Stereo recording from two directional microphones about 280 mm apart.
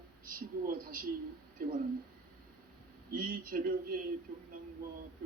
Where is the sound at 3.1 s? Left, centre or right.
Right.